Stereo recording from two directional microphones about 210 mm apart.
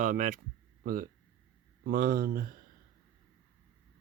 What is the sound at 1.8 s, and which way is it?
Speech, 45° right (ahead or behind).